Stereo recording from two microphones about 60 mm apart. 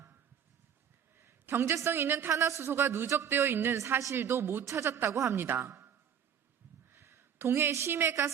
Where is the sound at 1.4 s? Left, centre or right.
Right.